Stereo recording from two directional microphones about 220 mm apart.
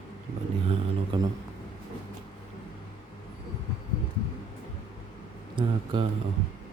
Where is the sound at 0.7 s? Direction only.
20° right (ahead or behind).